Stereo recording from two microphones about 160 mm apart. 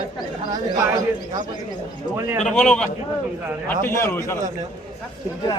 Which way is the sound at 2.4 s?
5° left (ahead or behind).